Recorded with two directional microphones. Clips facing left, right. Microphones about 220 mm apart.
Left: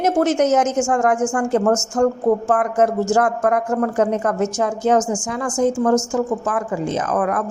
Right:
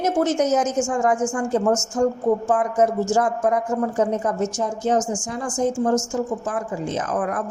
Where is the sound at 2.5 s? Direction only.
70° left (ahead or behind); by 7.4 s 90° left.